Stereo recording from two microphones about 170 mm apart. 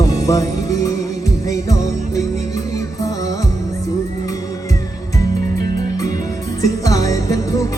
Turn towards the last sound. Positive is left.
turn(degrees=20)  # may be behind; listen again after turning